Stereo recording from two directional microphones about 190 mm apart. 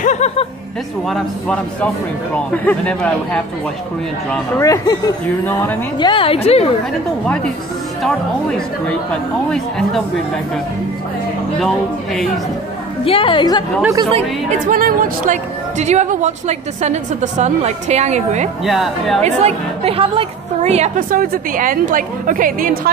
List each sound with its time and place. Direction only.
0.0 s music: 35° left (ahead or behind)
1.0 s speech: 5° left (ahead or behind)
4.6 s a woman's voice: 15° left (ahead or behind); by 6.7 s 30° left (ahead or behind)
8.0 s speech: 5° left (ahead or behind)
11.6 s speech: centre (ahead or behind)
13.0 s a woman's voice: 25° left (ahead or behind)
14.7 s a woman's voice: 50° right (ahead or behind)
18.6 s speech: centre (ahead or behind)
19.2 s a woman's voice: 35° right (ahead or behind)